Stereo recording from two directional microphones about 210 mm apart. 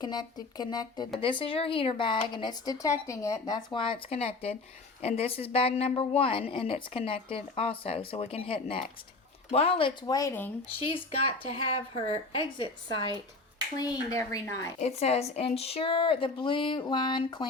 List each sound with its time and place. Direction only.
0.0 s a woman's voice: 20° left (ahead or behind)
10.8 s a woman's voice: 25° left (ahead or behind)
14.8 s a woman's voice: 30° left (ahead or behind)